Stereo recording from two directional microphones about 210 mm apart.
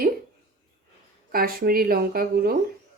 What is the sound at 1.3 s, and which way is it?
Speech, 45° right (ahead or behind).